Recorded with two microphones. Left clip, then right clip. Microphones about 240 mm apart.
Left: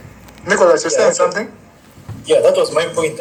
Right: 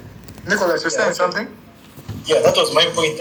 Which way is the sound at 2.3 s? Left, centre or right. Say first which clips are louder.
Left 3 dB; left.